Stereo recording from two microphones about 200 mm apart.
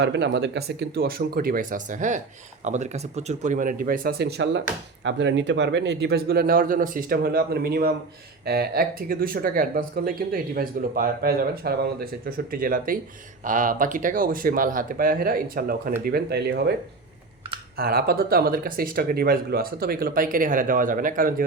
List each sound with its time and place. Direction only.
0.0 s speech: 60° right (ahead or behind)
17.7 s speech: 50° right (ahead or behind)